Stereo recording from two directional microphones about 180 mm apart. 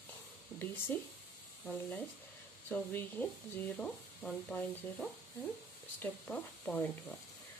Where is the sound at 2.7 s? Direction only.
10° left (ahead or behind).